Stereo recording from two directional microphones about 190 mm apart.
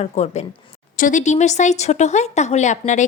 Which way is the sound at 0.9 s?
45° left (ahead or behind).